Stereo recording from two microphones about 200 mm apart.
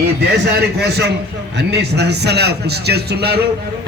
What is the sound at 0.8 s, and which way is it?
A man's voice, 55° right (ahead or behind).